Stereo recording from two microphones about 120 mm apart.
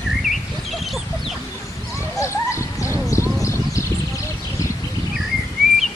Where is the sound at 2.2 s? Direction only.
25° left (ahead or behind).